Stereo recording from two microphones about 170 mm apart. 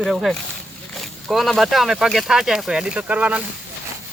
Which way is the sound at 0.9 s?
Centre (ahead or behind).